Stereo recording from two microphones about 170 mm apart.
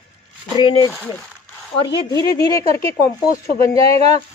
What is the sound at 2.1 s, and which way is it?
Speech, 20° left (ahead or behind).